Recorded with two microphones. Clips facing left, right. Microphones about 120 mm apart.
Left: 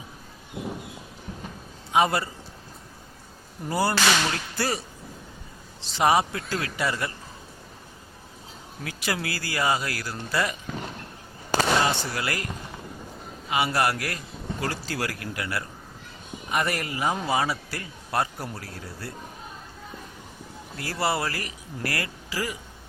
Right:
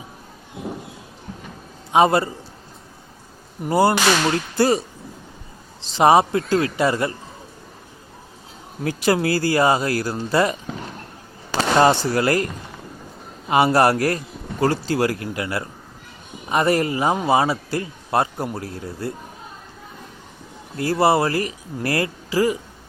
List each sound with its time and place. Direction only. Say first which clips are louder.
1.9 s a man's voice: right 7 dB; 30° right (ahead or behind)
3.6 s speech: right 7 dB; 25° right (ahead or behind)
5.9 s speech: right 7 dB; 30° right (ahead or behind)
8.8 s speech: right 11 dB; 35° right (ahead or behind)
11.8 s speech: right 10 dB; 40° right (ahead or behind)
13.5 s speech: right 9 dB; 40° right (ahead or behind); by 19.1 s 20° right (ahead or behind)
20.7 s speech: right 10 dB; 25° right (ahead or behind)